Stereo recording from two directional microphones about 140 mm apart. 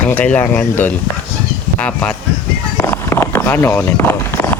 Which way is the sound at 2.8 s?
15° left (ahead or behind).